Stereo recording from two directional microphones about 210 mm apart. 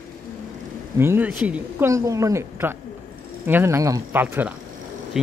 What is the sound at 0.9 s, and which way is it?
Speech, 10° right (ahead or behind).